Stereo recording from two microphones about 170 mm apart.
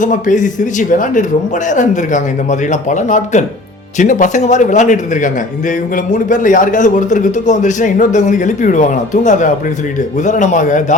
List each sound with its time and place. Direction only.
0.0 s a man's voice: 50° left (ahead or behind)